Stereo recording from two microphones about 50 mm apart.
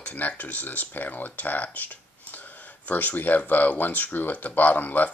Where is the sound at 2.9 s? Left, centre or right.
Left.